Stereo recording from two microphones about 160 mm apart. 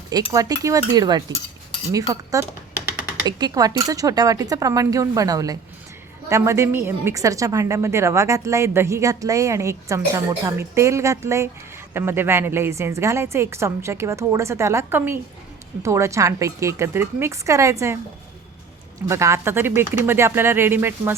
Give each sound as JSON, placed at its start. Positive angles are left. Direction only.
{"t": 0.1, "sound": "a woman's voice", "side_deg": -20}
{"t": 19.0, "sound": "a woman's voice", "side_deg": -20}